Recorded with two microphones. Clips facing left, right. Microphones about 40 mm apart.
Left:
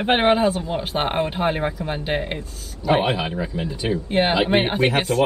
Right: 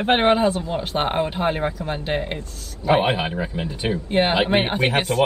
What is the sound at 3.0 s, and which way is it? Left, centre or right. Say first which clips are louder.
Speech: right 1 dB; right.